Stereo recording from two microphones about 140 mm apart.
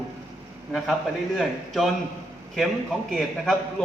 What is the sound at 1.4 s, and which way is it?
Speech, centre (ahead or behind).